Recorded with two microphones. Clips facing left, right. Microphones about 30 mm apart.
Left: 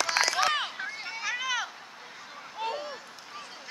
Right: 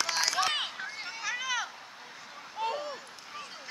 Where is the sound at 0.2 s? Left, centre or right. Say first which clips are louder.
Left 3 dB; centre.